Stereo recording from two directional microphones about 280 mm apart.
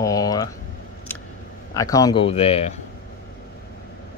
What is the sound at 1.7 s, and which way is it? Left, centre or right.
Speech, centre.